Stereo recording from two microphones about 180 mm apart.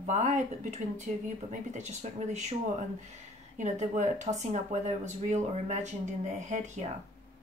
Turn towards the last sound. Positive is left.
turn(degrees=-40)  # may be behind; listen again after turning